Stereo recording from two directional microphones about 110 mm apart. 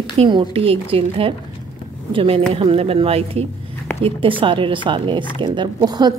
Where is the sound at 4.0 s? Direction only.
55° right (ahead or behind).